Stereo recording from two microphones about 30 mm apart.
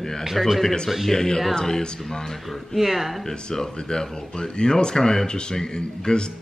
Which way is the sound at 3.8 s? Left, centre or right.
Left.